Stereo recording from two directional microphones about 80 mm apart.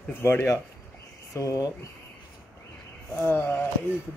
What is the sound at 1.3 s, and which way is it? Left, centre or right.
Speech, left.